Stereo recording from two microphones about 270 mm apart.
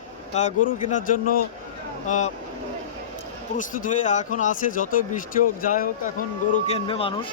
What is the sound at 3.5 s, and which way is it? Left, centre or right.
Speech, left.